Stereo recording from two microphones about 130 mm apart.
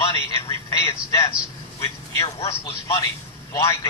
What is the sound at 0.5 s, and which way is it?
Speech, 20° left (ahead or behind).